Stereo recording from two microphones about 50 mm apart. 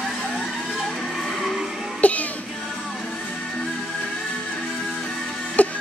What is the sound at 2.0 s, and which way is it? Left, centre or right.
Music, left.